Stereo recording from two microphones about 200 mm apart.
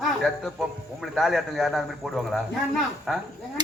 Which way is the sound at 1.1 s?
Centre (ahead or behind).